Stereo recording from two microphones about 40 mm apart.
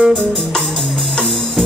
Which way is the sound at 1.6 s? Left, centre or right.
Centre.